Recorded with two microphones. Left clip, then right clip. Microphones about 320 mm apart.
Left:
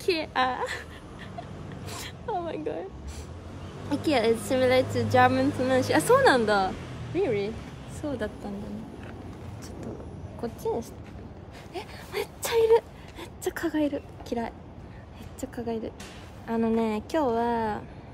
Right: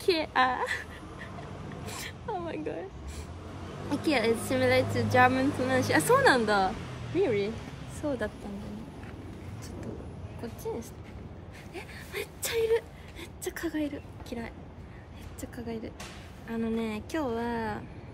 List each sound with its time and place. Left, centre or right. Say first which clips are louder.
0.0 s a woman's voice: even; centre
1.9 s a sound: left 3 dB; centre
3.9 s a woman's voice: left 3 dB; centre
10.4 s a woman's voice: left 7 dB; centre
15.5 s a woman's voice: left 6 dB; centre